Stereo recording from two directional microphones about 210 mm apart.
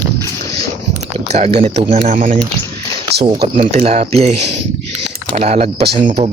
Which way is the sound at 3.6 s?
30° right (ahead or behind).